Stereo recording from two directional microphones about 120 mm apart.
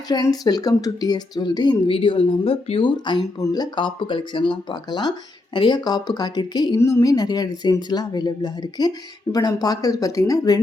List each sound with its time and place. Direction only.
0.1 s speech: 35° left (ahead or behind)
1.9 s speech: 50° left (ahead or behind); by 10.6 s 30° left (ahead or behind)